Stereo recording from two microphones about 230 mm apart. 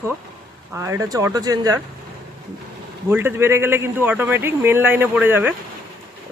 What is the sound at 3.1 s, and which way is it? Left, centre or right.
A man's voice, centre.